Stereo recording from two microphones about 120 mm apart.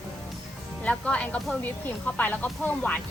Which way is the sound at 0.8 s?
10° left (ahead or behind).